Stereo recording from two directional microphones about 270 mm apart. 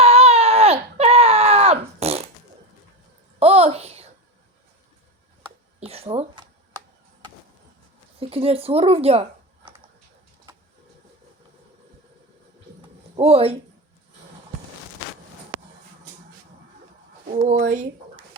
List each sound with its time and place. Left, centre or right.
0.0 s baby cry: right
3.4 s a sound: right
5.8 s a sound: right
8.2 s speech: right
13.1 s speech: right
17.2 s speech: right